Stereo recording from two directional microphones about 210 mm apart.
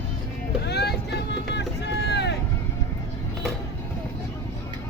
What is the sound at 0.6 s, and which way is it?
Vehicle, 50° left (ahead or behind).